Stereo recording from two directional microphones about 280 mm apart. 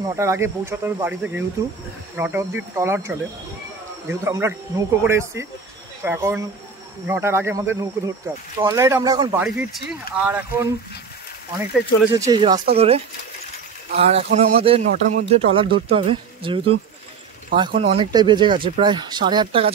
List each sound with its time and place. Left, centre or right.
0.0 s speech: centre